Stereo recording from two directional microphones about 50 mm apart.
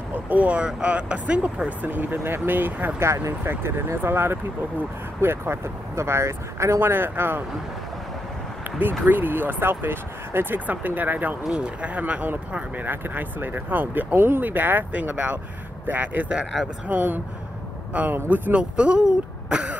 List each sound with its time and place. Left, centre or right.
0.1 s speech: right
1.9 s speech: right
3.0 s speech: right
3.4 s speech: right
6.8 s speech: right
9.0 s speech: right
11.5 s speech: right
15.0 s speech: right
18.5 s speech: right